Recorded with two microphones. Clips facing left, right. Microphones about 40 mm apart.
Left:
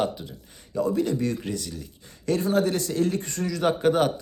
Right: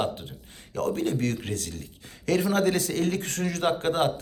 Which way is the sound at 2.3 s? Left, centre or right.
Right.